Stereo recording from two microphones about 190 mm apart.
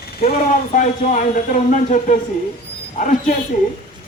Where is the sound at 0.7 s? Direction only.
40° left (ahead or behind).